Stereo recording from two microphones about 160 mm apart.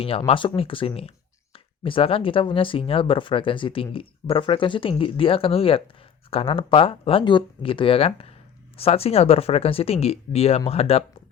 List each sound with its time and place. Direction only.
0.0 s speech: 35° left (ahead or behind)